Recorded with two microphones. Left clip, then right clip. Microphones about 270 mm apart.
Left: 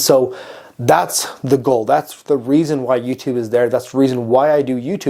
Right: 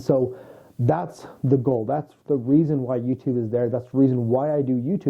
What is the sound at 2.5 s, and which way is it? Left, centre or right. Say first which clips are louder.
Speech: left 6 dB; centre.